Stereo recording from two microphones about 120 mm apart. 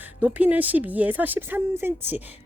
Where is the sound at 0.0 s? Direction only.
15° right (ahead or behind).